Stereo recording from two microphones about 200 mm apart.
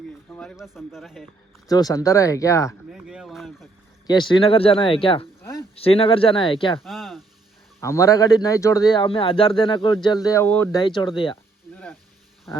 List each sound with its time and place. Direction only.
0.3 s speech: 5° left (ahead or behind)
1.6 s speech: 20° left (ahead or behind)
2.9 s a sound: centre (ahead or behind)
4.0 s a man's voice: 20° left (ahead or behind)
6.8 s speech: centre (ahead or behind)
7.8 s a man's voice: 15° left (ahead or behind)
10.8 s a man's voice: 25° left (ahead or behind)
11.7 s a sound: 5° left (ahead or behind)